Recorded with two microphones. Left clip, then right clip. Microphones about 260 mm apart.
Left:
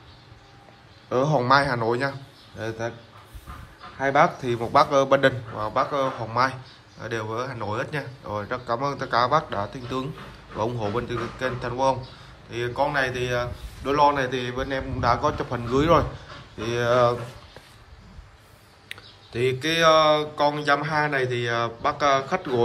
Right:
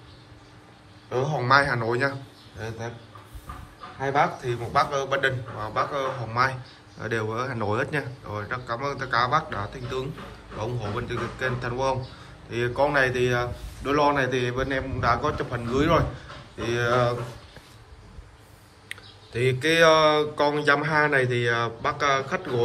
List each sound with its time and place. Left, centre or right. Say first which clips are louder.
1.1 s a man's voice: left 5 dB; left
1.4 s a man's voice: right 3 dB; centre
4.0 s a man's voice: left 4 dB; left
18.9 s speech: even; centre